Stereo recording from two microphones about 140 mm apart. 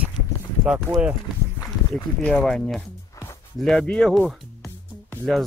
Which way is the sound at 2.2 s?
5° left (ahead or behind).